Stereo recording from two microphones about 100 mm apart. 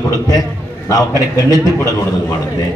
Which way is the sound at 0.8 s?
35° left (ahead or behind).